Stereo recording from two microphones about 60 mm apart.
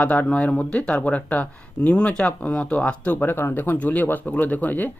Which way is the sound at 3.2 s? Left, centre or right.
Left.